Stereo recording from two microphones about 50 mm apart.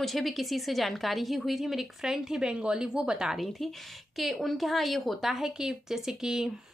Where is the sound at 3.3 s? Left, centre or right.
Centre.